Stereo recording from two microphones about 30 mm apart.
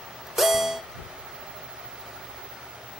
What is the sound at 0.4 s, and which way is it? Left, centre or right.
Music, centre.